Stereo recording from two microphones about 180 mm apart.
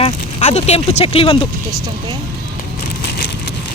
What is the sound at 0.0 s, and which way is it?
Speech, 35° left (ahead or behind).